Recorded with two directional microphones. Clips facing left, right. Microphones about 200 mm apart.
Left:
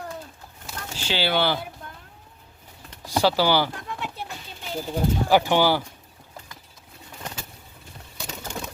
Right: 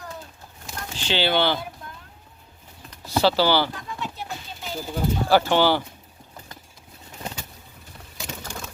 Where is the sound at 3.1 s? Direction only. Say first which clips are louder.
Right 1 dB; 15° left (ahead or behind).